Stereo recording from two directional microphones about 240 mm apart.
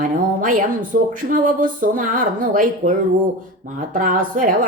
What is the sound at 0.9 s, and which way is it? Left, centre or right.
Speech, right.